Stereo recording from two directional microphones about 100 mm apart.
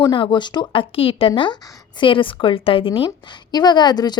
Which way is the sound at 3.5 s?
45° left (ahead or behind).